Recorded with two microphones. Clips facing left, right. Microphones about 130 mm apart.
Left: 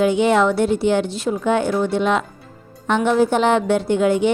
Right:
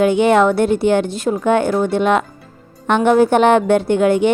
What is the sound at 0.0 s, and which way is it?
Speech, 55° right (ahead or behind).